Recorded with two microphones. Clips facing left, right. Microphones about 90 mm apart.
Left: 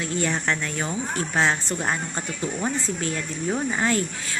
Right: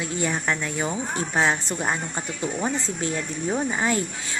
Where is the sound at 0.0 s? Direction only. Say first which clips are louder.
Left 1 dB; 10° right (ahead or behind).